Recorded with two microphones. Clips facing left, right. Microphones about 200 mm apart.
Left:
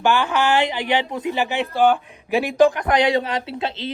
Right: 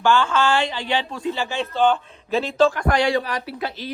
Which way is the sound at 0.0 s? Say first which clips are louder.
Even; 15° left (ahead or behind).